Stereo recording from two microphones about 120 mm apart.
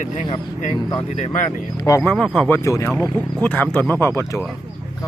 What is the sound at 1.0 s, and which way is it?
Speech, 70° left (ahead or behind).